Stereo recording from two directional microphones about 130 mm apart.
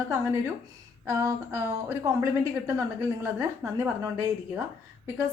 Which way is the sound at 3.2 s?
20° right (ahead or behind).